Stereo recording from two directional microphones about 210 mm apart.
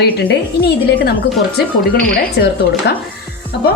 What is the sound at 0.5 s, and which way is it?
Speech, 50° left (ahead or behind).